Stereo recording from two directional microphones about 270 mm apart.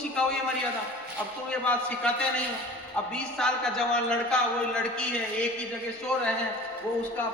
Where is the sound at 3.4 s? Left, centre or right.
Centre.